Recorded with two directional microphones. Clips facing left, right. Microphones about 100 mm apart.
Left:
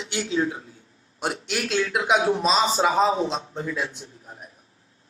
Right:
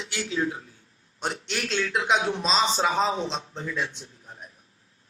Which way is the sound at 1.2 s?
10° left (ahead or behind).